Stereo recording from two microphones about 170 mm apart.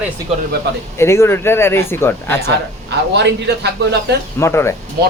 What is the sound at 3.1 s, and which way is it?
Speech, 85° right.